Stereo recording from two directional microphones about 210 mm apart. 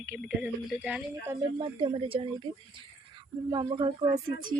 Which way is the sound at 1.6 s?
25° right (ahead or behind).